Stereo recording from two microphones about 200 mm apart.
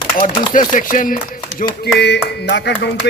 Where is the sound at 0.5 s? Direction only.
40° left (ahead or behind).